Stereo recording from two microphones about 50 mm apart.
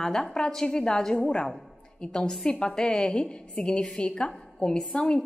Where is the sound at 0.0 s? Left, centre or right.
Centre.